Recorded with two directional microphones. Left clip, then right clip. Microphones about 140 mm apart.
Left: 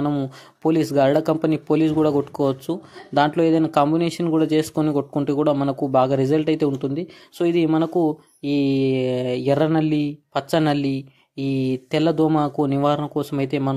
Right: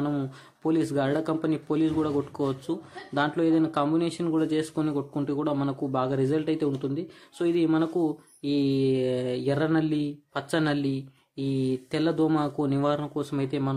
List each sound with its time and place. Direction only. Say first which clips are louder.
0.0 s speech: left 6 dB; 30° left (ahead or behind)
0.6 s speech: left 8 dB; 45° left (ahead or behind)